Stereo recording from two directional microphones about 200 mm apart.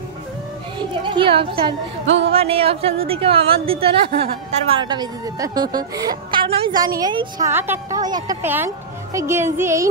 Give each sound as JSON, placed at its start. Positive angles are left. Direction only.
{"t": 0.7, "sound": "a woman's voice", "side_deg": -25}
{"t": 2.0, "sound": "music", "side_deg": -65}
{"t": 2.3, "sound": "a woman's voice", "side_deg": -30}